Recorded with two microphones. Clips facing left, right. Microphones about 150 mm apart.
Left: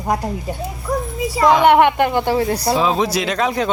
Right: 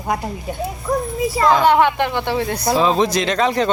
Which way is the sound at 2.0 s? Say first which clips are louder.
Left 4 dB; 45° left (ahead or behind).